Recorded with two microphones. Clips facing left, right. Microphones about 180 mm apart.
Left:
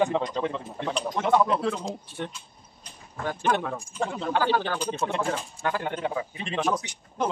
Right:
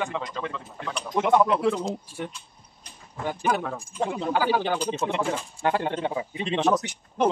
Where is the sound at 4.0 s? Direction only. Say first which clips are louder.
Right 1 dB; 15° right (ahead or behind).